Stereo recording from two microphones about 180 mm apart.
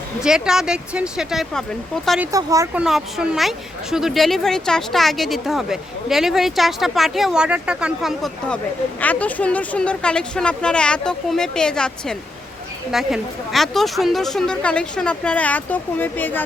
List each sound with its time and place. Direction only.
0.2 s speech: 5° right (ahead or behind)
2.3 s speech: 20° right (ahead or behind)
2.7 s speech: 5° right (ahead or behind)